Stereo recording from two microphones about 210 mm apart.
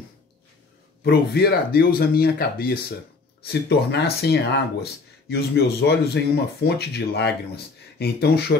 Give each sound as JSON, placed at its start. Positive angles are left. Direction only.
{"t": 1.0, "sound": "speech", "side_deg": 45}